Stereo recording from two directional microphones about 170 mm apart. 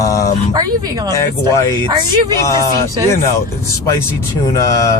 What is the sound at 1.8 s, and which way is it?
Speech, 25° right (ahead or behind).